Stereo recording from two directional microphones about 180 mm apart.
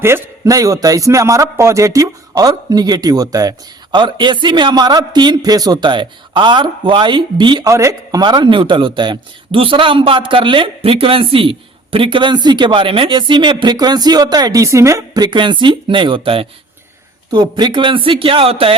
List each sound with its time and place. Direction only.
0.0 s a man's voice: 15° right (ahead or behind); by 18.8 s 30° right (ahead or behind)